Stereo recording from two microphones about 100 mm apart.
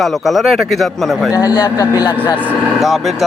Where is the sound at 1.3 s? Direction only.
35° left (ahead or behind).